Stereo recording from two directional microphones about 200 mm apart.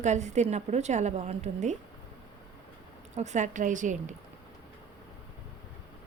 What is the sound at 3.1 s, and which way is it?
A woman's voice, 35° right (ahead or behind).